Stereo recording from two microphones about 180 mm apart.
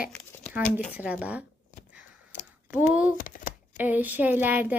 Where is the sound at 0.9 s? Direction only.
5° right (ahead or behind).